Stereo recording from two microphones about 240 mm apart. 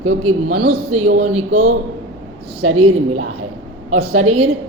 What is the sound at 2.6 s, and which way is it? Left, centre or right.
A woman's voice, right.